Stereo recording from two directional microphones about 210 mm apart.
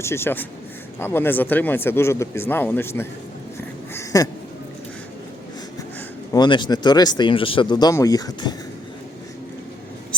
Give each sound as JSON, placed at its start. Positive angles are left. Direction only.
{"t": 0.0, "sound": "speech", "side_deg": 10}
{"t": 3.9, "sound": "a sound", "side_deg": 15}
{"t": 6.3, "sound": "speech", "side_deg": 20}